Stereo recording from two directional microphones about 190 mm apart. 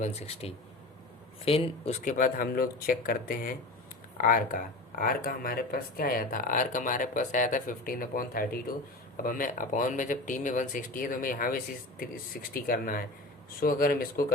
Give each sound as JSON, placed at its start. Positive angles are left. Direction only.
{"t": 0.0, "sound": "speech", "side_deg": 35}
{"t": 2.0, "sound": "speech", "side_deg": 45}